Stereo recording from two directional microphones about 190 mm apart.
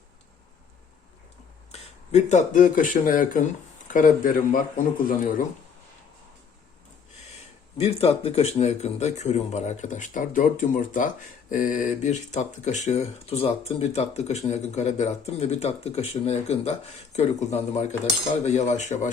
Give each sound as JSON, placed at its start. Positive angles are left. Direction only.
{"t": 1.7, "sound": "speech", "side_deg": 35}
{"t": 7.8, "sound": "speech", "side_deg": 30}